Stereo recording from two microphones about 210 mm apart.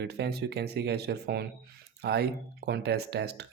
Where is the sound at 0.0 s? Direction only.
50° right (ahead or behind).